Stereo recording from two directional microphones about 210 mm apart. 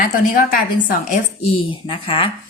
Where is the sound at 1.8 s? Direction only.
25° left (ahead or behind).